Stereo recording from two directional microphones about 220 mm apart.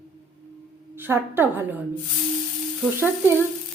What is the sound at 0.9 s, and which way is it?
Speech, 10° right (ahead or behind).